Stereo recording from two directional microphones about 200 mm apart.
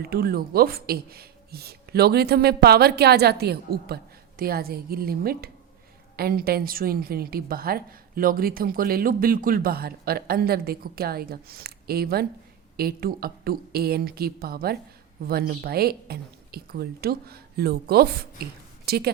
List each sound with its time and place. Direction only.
0.0 s a woman's voice: 50° right (ahead or behind)